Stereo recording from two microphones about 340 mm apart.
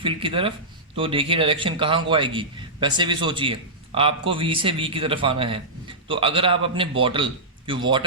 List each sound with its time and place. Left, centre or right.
0.0 s a man's voice: centre